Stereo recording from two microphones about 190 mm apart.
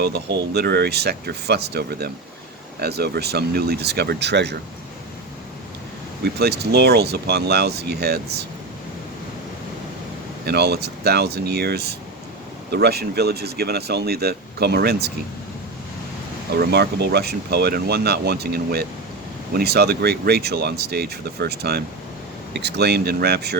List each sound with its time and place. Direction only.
0.0 s speech: 60° right (ahead or behind)
6.2 s speech: 60° right (ahead or behind)
10.4 s speech: 60° right (ahead or behind)
16.6 s speech: 60° right (ahead or behind)